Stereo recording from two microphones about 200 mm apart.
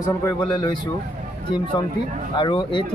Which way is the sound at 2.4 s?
25° left (ahead or behind).